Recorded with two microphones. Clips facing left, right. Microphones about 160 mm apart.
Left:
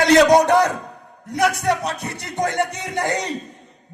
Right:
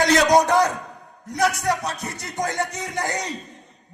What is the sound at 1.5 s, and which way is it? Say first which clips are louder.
Music: left 3 dB; 30° left (ahead or behind).